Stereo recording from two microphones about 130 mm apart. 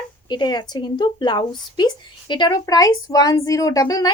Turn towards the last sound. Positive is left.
turn(degrees=30)  # may be behind; listen again after turning